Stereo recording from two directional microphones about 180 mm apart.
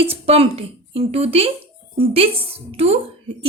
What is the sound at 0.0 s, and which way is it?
Speech, 35° right (ahead or behind).